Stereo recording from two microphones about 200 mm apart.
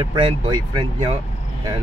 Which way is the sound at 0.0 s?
25° right (ahead or behind).